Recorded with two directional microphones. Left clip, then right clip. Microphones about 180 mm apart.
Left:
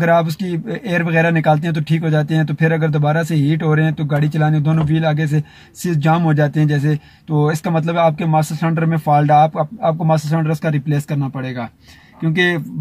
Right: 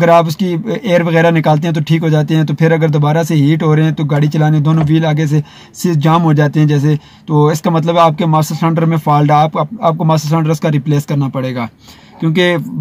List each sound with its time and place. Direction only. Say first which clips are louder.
0.7 s speech: right 8 dB; 15° right (ahead or behind)